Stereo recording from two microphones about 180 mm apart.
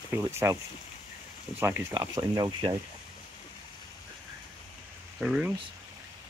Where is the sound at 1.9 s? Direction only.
25° right (ahead or behind).